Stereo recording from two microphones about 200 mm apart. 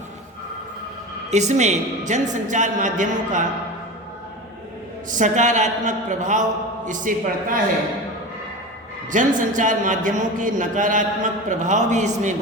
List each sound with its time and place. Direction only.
1.3 s a man's voice: 35° right (ahead or behind)
5.1 s a man's voice: 40° right (ahead or behind)
9.1 s a man's voice: 40° right (ahead or behind)